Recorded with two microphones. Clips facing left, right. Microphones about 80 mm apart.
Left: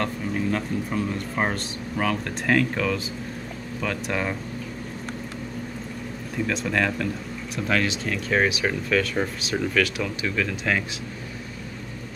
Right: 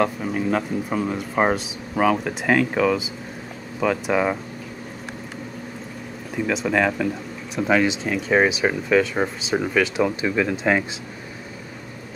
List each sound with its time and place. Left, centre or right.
0.3 s speech: centre
6.3 s speech: centre